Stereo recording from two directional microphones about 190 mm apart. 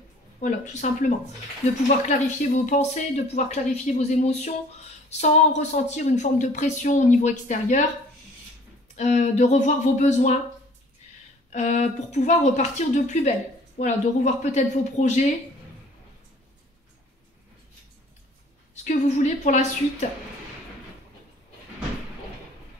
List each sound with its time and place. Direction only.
0.4 s speech: 40° left (ahead or behind)
8.9 s speech: 40° left (ahead or behind)
11.5 s speech: 40° left (ahead or behind)
18.9 s speech: 35° left (ahead or behind)